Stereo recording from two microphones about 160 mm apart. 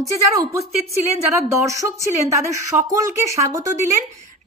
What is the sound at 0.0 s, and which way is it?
Speech, 20° right (ahead or behind).